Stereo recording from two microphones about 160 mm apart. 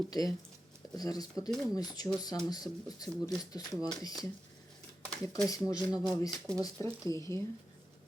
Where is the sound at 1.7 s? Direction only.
25° left (ahead or behind).